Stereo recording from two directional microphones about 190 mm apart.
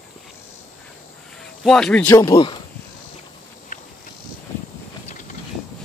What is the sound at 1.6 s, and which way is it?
Speech, 5° left (ahead or behind).